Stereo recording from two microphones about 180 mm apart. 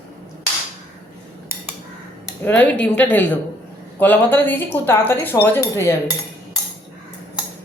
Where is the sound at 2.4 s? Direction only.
10° left (ahead or behind).